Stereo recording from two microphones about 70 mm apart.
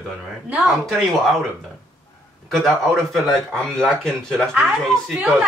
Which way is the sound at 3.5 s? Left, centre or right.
Centre.